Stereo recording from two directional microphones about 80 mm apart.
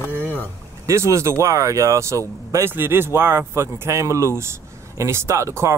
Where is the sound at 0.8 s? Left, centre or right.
Right.